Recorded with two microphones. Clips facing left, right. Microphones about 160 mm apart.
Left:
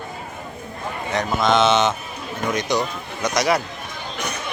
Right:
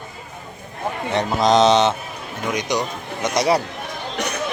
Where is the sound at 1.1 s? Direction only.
35° right (ahead or behind).